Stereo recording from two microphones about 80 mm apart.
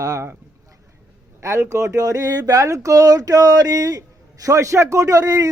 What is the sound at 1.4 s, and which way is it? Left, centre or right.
Speech, right.